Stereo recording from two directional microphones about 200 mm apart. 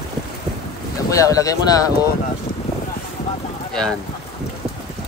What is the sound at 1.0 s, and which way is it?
Speech, 15° left (ahead or behind).